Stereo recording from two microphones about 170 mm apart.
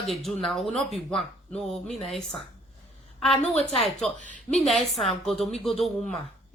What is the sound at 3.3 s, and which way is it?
Speech, 40° left (ahead or behind).